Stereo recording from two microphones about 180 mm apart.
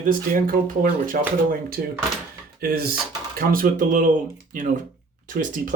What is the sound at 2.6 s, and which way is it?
Speech, 60° right (ahead or behind).